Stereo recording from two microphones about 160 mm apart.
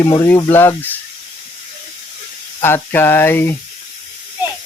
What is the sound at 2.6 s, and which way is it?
Speech, 15° left (ahead or behind).